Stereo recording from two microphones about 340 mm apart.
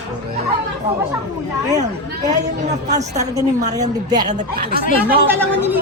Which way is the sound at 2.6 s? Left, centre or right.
Centre.